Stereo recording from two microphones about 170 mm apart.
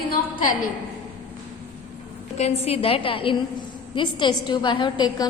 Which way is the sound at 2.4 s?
35° left (ahead or behind).